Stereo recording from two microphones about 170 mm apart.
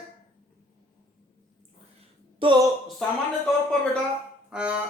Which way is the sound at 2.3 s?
30° right (ahead or behind).